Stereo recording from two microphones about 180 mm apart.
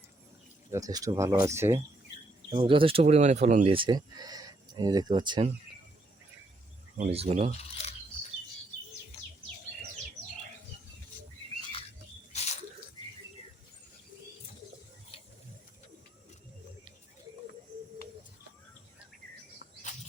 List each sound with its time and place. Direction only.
0.7 s speech: 20° right (ahead or behind)
2.6 s speech: 30° right (ahead or behind)
3.8 s speech: 25° right (ahead or behind)
6.9 s speech: 40° right (ahead or behind)
7.5 s a sound: 35° left (ahead or behind)
12.3 s drip: 40° left (ahead or behind)
15.1 s a sound: 30° left (ahead or behind)